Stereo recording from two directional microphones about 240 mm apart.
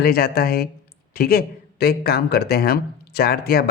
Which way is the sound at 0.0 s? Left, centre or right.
Left.